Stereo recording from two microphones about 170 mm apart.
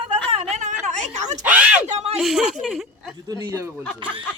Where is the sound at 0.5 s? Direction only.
45° right (ahead or behind).